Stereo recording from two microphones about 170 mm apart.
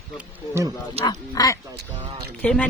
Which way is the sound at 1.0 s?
25° left (ahead or behind).